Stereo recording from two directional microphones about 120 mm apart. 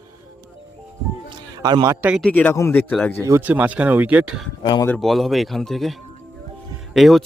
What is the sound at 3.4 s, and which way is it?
Speech, 15° right (ahead or behind).